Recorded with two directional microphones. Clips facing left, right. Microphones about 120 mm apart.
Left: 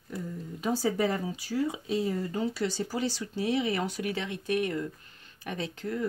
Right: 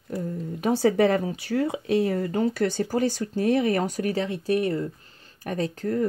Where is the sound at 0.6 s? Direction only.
65° right (ahead or behind).